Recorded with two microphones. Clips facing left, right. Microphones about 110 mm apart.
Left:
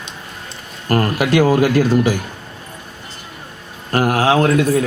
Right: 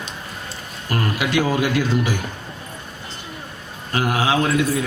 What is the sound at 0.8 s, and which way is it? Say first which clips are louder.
Speech: left 6 dB; 50° left (ahead or behind).